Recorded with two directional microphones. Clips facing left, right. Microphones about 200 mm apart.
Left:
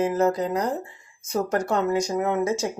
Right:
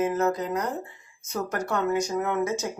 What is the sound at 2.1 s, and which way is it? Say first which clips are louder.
Speech: left 3 dB; 25° left (ahead or behind).